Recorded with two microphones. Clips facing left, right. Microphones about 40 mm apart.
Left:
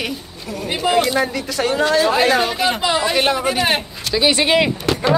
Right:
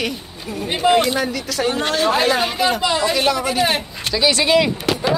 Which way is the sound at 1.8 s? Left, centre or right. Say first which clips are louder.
Left 5 dB; right.